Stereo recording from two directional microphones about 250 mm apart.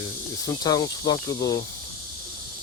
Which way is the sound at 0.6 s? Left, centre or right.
Centre.